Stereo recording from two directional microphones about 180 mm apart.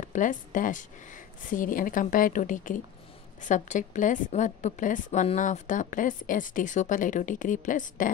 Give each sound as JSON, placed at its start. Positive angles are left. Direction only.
{"t": 0.0, "sound": "a woman's voice", "side_deg": 45}